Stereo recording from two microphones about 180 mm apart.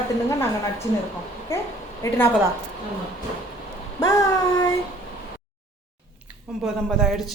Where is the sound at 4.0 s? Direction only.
20° left (ahead or behind).